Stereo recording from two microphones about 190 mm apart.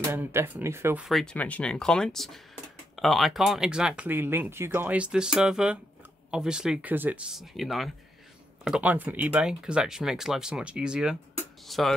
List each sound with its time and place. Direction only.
0.0 s speech: 15° right (ahead or behind)
1.0 s speech: centre (ahead or behind)